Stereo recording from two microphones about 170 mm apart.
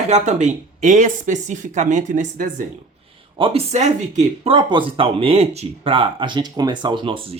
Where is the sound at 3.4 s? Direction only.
35° right (ahead or behind).